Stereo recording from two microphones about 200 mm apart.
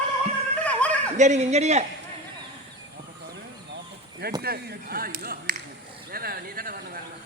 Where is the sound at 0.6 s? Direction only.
5° left (ahead or behind).